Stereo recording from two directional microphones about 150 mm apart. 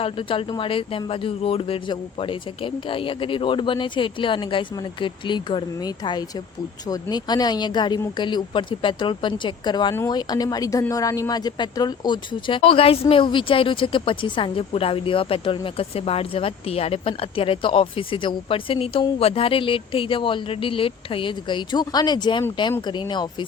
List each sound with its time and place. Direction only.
0.0 s speech: 35° left (ahead or behind)